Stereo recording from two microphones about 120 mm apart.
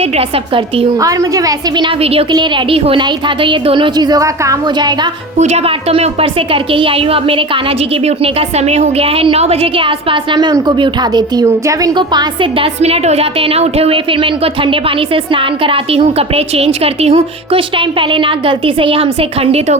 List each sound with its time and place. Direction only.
0.0 s a woman's voice: 55° right (ahead or behind)
0.9 s a woman's voice: 30° right (ahead or behind)
2.0 s a woman's voice: 55° right (ahead or behind)
2.3 s a woman's voice: 40° right (ahead or behind)
5.4 s a woman's voice: 65° right (ahead or behind); by 11.9 s 25° right (ahead or behind)
11.9 s a woman's voice: 40° right (ahead or behind); by 19.7 s 60° right (ahead or behind)